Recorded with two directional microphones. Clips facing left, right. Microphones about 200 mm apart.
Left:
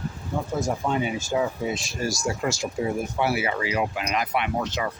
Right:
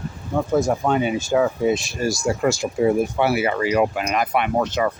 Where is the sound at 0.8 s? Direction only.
65° right (ahead or behind).